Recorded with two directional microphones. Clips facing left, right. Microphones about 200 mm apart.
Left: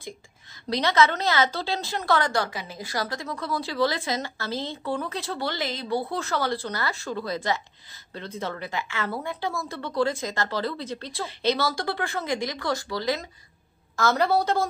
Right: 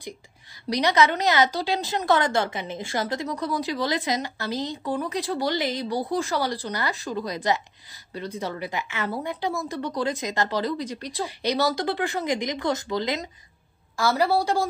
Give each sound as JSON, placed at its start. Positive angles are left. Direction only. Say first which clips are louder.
{"t": 0.7, "sound": "a woman's voice", "louder": "right 1 dB", "side_deg": -15}
{"t": 13.9, "sound": "a woman's voice", "louder": "even", "side_deg": -10}